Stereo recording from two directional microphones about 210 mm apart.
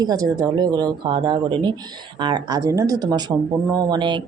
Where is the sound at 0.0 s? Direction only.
15° right (ahead or behind).